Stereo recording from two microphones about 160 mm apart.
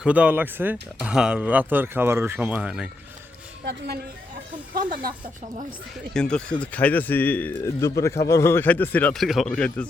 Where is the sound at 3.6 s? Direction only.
85° right.